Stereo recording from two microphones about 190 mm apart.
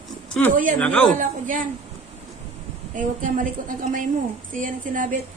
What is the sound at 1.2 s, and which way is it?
Speech, 45° right (ahead or behind).